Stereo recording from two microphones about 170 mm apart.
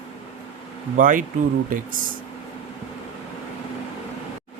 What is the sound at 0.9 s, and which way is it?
Speech, 50° right (ahead or behind).